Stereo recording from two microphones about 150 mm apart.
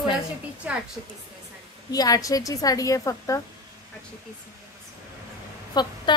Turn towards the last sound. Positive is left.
turn(degrees=25)  # may be behind; listen again after turning